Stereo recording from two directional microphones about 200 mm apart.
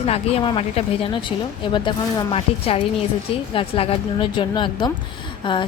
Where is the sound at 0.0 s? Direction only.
30° left (ahead or behind).